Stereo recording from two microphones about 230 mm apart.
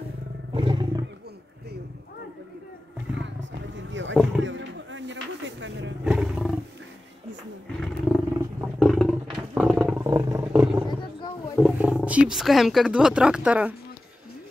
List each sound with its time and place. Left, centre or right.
0.6 s wild animals: right
3.7 s roaring cats: right
4.4 s a sound: right
6.0 s roar: centre
7.8 s wild animals: centre
10.6 s roaring cats: centre
11.5 s speech: centre